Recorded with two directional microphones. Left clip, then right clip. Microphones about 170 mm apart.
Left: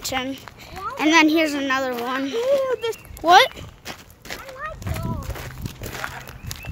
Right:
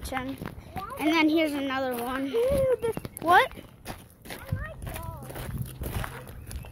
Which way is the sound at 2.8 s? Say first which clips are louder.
Left 6 dB; 20° left (ahead or behind).